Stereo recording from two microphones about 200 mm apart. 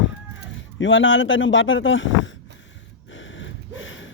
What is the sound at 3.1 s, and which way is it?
Gasp, 70° left (ahead or behind).